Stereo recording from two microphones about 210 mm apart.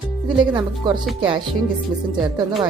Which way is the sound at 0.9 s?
20° right (ahead or behind).